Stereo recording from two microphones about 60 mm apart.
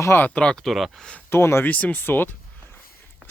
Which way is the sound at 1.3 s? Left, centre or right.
Left.